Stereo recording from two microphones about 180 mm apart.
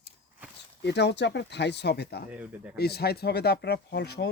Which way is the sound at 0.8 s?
75° left (ahead or behind).